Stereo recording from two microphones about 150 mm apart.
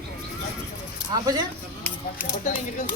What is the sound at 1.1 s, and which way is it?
Speech, 25° right (ahead or behind).